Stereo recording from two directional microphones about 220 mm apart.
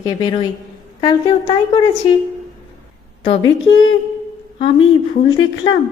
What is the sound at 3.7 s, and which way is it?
Speech, 60° left (ahead or behind).